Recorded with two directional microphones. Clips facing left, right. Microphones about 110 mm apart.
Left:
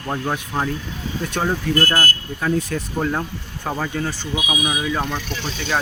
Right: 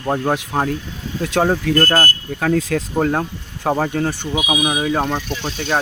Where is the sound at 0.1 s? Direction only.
40° right (ahead or behind).